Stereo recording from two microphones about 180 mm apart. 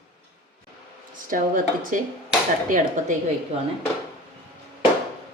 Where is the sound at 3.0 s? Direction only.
45° right (ahead or behind).